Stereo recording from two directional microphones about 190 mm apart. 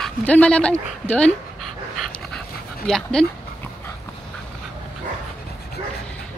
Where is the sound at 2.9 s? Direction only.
5° left (ahead or behind).